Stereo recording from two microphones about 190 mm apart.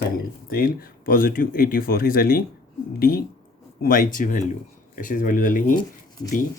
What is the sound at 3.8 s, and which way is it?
Speech, 45° left (ahead or behind).